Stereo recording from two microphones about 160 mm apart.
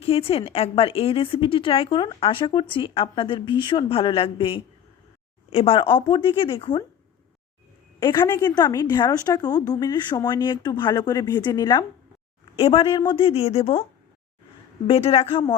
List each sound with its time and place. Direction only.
0.0 s speech: 35° left (ahead or behind)
7.9 s a woman's voice: 30° left (ahead or behind)
12.5 s speech: 35° left (ahead or behind)
14.8 s speech: 35° left (ahead or behind)